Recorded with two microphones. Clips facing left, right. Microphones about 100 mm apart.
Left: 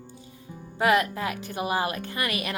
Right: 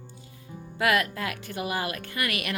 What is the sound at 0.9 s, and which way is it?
Speech, 20° left (ahead or behind).